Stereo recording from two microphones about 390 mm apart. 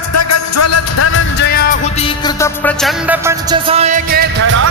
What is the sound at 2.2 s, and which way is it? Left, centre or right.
Music, centre.